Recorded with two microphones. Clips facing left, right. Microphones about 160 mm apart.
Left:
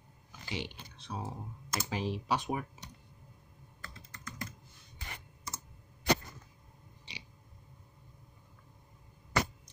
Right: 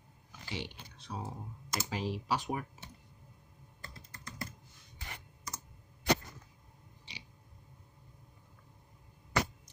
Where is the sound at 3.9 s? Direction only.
30° right (ahead or behind).